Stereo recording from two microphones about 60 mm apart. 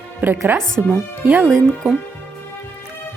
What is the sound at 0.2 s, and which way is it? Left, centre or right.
Speech, right.